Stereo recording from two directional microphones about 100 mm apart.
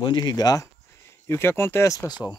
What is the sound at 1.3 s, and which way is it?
Speech, 25° left (ahead or behind).